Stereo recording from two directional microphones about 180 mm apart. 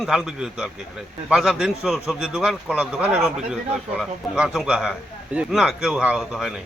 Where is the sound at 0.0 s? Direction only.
Centre (ahead or behind).